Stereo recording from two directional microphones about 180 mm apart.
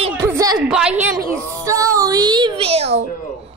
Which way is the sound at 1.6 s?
20° right (ahead or behind).